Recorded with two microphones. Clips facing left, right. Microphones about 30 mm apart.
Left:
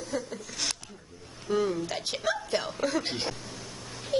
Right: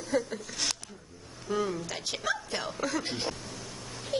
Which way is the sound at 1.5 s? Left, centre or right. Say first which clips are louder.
Left 3 dB; centre.